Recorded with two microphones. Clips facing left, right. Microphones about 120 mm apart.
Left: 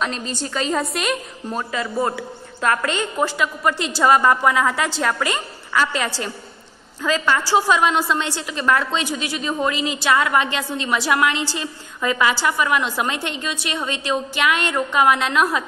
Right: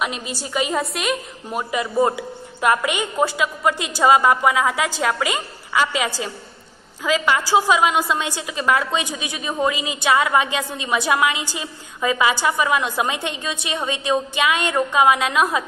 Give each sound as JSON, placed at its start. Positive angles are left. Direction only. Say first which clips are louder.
{"t": 0.0, "sound": "a woman's voice", "louder": "left 1 dB", "side_deg": -10}
{"t": 0.9, "sound": "a woman's voice", "louder": "even", "side_deg": 0}
{"t": 1.6, "sound": "a woman's voice", "louder": "right 4 dB", "side_deg": -15}